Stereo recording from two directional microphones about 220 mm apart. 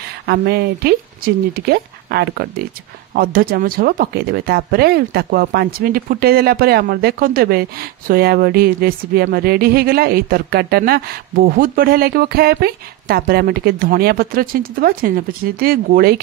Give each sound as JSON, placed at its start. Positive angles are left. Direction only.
{"t": 0.3, "sound": "speech", "side_deg": -45}